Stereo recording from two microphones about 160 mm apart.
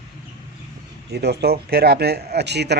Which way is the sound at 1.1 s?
90° right.